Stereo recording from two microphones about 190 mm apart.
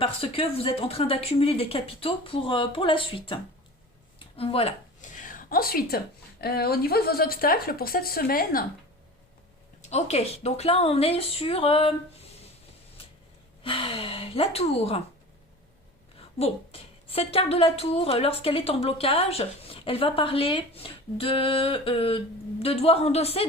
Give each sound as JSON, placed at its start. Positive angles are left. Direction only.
{"t": 0.0, "sound": "a woman's voice", "side_deg": 30}
{"t": 4.4, "sound": "a sound", "side_deg": 30}
{"t": 6.4, "sound": "speech", "side_deg": 55}
{"t": 9.8, "sound": "a woman's voice", "side_deg": 35}
{"t": 13.6, "sound": "a woman's voice", "side_deg": 30}
{"t": 16.4, "sound": "a woman's voice", "side_deg": 30}